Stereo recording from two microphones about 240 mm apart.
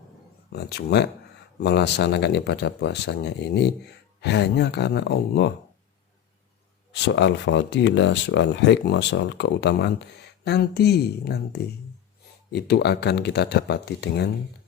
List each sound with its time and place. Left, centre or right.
0.5 s speech: left
6.9 s speech: left